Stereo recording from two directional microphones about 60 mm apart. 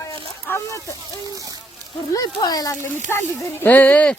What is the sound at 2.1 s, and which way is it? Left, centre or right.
Speech, left.